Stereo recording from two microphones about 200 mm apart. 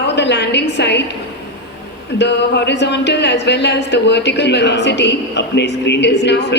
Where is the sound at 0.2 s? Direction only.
60° left (ahead or behind).